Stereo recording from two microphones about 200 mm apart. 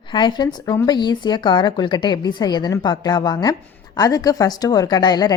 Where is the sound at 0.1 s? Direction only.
20° left (ahead or behind).